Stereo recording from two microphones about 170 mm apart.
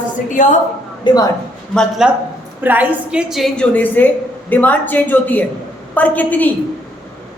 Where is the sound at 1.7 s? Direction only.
Centre (ahead or behind).